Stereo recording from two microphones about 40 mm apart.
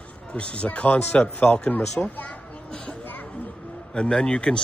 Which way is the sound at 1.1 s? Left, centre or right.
Left.